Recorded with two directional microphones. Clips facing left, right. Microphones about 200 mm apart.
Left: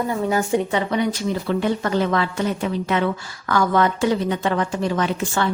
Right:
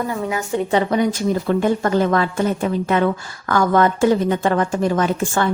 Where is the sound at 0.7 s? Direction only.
45° right (ahead or behind).